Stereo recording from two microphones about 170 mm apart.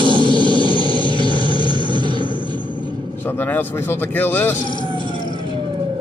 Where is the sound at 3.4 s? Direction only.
10° left (ahead or behind).